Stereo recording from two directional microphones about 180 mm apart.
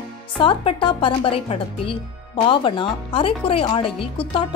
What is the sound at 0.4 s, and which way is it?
A woman's voice, 30° left (ahead or behind).